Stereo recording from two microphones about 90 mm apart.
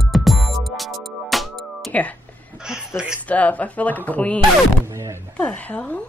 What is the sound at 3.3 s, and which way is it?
A woman's voice, 15° left (ahead or behind).